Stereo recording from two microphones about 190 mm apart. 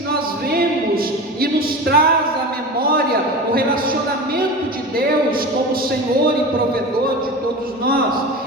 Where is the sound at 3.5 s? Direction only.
50° right (ahead or behind).